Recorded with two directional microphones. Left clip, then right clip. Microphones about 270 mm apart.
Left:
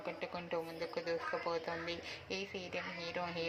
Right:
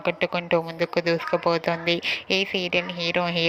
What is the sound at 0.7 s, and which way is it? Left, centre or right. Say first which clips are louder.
Speech: right 16 dB; right.